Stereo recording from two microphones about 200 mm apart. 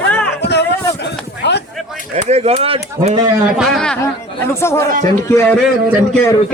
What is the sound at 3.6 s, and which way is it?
Speech, centre (ahead or behind).